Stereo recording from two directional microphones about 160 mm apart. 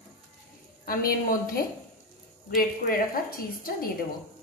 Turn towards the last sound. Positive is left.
turn(degrees=65)  # may be behind; listen again after turning